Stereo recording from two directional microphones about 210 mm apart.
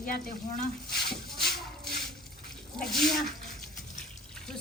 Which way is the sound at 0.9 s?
50° left (ahead or behind).